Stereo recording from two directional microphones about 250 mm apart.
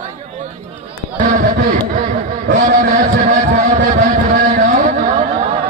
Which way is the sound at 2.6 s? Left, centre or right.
Right.